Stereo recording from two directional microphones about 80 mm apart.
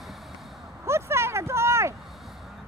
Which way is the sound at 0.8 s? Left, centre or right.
Right.